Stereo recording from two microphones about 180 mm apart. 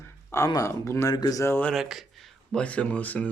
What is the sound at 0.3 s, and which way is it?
Speech, 15° left (ahead or behind).